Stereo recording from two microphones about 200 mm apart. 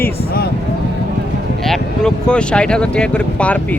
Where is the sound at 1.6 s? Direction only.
Centre (ahead or behind).